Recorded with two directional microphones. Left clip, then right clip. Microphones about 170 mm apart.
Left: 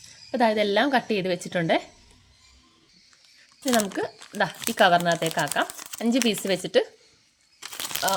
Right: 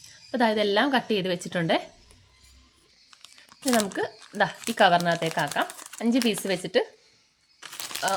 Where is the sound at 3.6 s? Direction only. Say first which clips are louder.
Left 1 dB; 5° left (ahead or behind).